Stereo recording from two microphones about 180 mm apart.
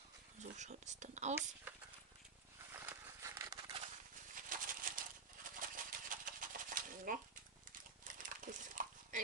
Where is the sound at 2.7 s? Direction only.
15° right (ahead or behind).